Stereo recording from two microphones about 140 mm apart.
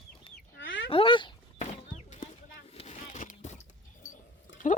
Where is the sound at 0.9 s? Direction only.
40° left (ahead or behind).